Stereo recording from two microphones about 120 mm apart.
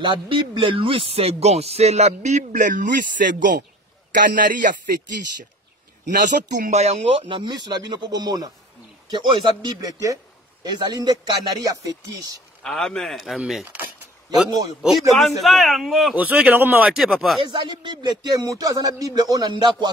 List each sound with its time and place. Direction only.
0.0 s speech: 45° right (ahead or behind); by 2.9 s 90° right
4.1 s a man's voice: 90° right
6.0 s speech: 90° right; by 11.9 s 30° right (ahead or behind)
12.6 s a man's voice: 5° left (ahead or behind)
14.8 s a man's voice: centre (ahead or behind)
16.2 s a man's voice: 15° right (ahead or behind)
16.9 s a man's voice: centre (ahead or behind)
17.4 s speech: 40° right (ahead or behind)